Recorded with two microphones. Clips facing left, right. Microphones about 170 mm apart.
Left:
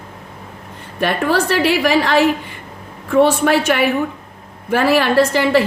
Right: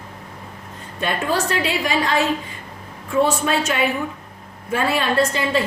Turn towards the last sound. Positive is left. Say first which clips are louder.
# left 6 dB
turn(degrees=75)  # may be behind; listen again after turning